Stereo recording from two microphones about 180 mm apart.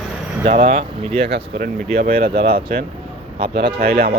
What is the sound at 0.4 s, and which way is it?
Speech, 50° right (ahead or behind).